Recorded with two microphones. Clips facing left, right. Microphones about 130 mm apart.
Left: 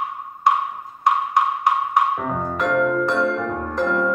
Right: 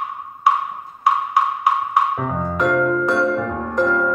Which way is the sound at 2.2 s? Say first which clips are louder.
Right 2 dB; centre (ahead or behind).